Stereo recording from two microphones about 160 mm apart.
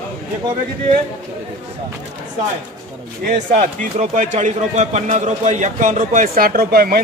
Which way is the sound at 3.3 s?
50° right (ahead or behind).